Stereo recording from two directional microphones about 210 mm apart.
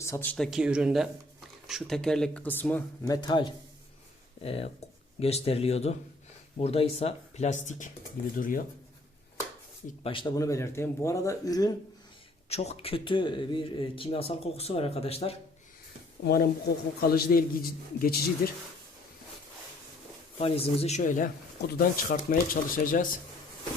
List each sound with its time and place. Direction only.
0.0 s speech: 10° left (ahead or behind)
3.1 s speech: 20° left (ahead or behind); by 8.6 s 40° left (ahead or behind)
10.0 s speech: 25° left (ahead or behind)
12.5 s speech: 30° left (ahead or behind)
16.2 s a man's voice: 45° left (ahead or behind)
20.4 s speech: 30° left (ahead or behind)